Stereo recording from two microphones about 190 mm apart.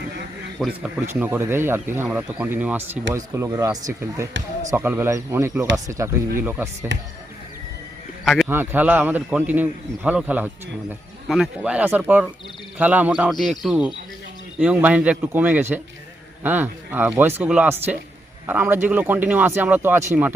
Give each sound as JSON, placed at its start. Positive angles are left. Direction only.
{"t": 0.8, "sound": "speech", "side_deg": -10}
{"t": 6.9, "sound": "speech", "side_deg": -75}
{"t": 8.2, "sound": "a sound", "side_deg": 0}
{"t": 8.4, "sound": "speech", "side_deg": -10}